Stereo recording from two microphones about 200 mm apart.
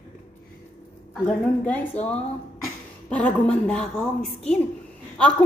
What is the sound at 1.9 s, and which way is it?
Speech, 35° left (ahead or behind).